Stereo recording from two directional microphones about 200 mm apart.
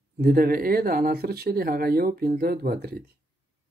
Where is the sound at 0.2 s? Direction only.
50° right (ahead or behind).